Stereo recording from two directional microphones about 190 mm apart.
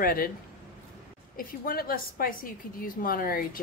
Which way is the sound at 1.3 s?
50° left (ahead or behind).